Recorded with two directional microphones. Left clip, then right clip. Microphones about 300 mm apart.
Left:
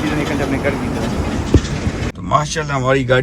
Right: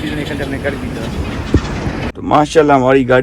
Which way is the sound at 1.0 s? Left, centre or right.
Left.